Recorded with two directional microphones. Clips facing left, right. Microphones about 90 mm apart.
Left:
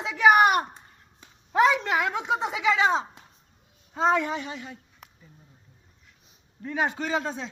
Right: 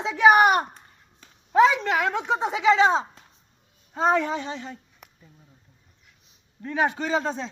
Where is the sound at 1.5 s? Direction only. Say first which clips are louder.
Right 3 dB; 10° left (ahead or behind).